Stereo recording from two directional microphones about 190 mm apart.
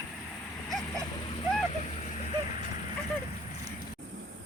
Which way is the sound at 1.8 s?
35° left (ahead or behind).